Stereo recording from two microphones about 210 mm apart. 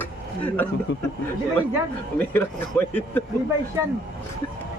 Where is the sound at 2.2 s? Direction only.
10° left (ahead or behind).